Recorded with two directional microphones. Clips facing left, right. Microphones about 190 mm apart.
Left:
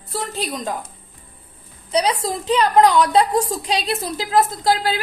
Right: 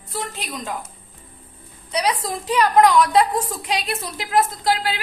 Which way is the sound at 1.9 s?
30° left (ahead or behind).